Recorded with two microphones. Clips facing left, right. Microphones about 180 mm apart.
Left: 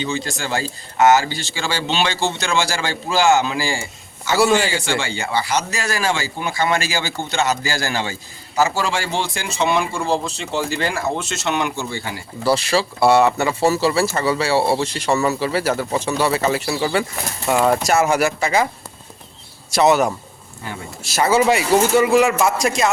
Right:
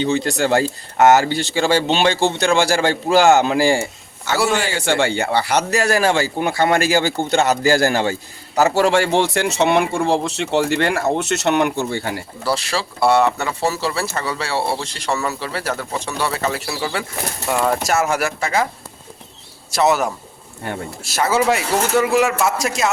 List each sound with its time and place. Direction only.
0.0 s speech: 60° right (ahead or behind)
4.4 s speech: centre (ahead or behind)
4.7 s speech: 60° right (ahead or behind)
12.5 s speech: centre (ahead or behind)
19.7 s speech: centre (ahead or behind)
20.7 s speech: 60° right (ahead or behind)
21.0 s speech: centre (ahead or behind)